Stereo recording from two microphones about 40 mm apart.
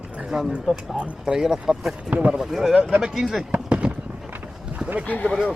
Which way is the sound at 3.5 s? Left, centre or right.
Right.